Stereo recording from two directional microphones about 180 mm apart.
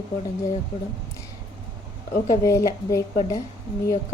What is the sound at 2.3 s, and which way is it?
A woman's voice, 20° left (ahead or behind).